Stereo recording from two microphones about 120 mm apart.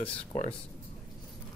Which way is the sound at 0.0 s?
60° left (ahead or behind).